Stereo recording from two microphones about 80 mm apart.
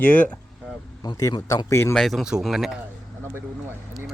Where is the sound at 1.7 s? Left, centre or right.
Left.